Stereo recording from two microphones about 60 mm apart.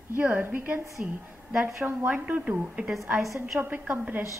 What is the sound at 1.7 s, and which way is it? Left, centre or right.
Speech, right.